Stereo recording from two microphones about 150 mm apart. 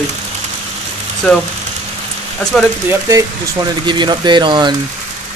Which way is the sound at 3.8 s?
30° right (ahead or behind).